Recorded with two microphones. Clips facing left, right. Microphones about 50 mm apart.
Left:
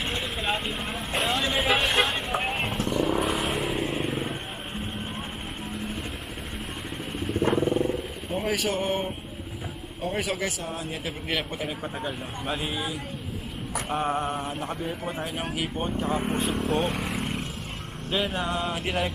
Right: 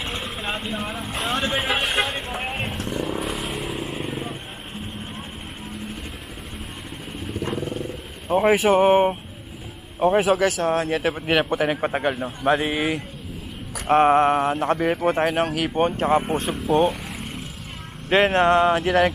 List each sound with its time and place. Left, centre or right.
0.0 s vehicle: centre
7.3 s wild animals: left
8.6 s speech: right
9.9 s a man's voice: right
10.2 s a man's voice: right
11.8 s speech: right
15.7 s speech: right
16.3 s speech: centre
18.1 s speech: right